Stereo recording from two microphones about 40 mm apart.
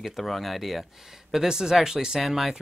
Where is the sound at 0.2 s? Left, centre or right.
Centre.